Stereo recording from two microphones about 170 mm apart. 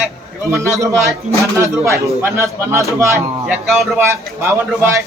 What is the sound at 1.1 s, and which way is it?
Speech, 15° right (ahead or behind).